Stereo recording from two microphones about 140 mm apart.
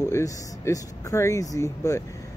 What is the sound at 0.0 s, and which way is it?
Speech, 20° left (ahead or behind).